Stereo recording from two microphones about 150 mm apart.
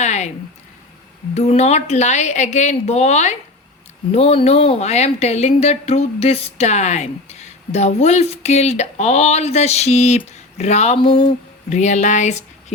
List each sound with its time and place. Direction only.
0.0 s a sound: 50° left (ahead or behind)
1.4 s a woman's voice: 45° left (ahead or behind)
11.7 s speech: 50° left (ahead or behind)